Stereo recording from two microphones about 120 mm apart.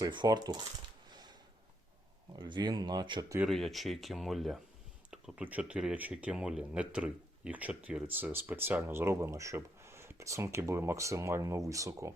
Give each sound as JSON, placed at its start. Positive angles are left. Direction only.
{"t": 0.0, "sound": "speech", "side_deg": -35}
{"t": 1.1, "sound": "a sound", "side_deg": -35}
{"t": 2.3, "sound": "speech", "side_deg": -35}
{"t": 3.5, "sound": "speech", "side_deg": 0}